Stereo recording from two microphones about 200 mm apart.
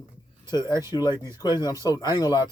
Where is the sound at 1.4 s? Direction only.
20° left (ahead or behind).